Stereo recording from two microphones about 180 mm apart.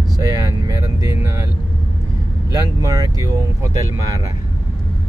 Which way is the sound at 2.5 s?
20° right (ahead or behind).